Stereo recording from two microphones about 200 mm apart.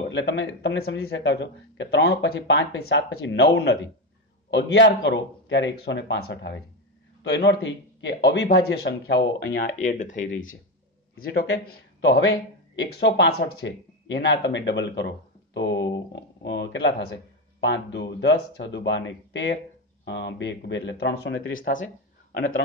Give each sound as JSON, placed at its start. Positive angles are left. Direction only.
{"t": 0.1, "sound": "speech", "side_deg": 65}
{"t": 3.5, "sound": "speech", "side_deg": 55}
{"t": 9.8, "sound": "speech", "side_deg": 40}
{"t": 11.3, "sound": "speech", "side_deg": 60}
{"t": 21.5, "sound": "speech", "side_deg": 45}